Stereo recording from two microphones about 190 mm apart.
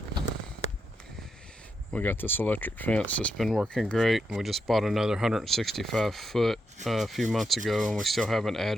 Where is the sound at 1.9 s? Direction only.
10° left (ahead or behind).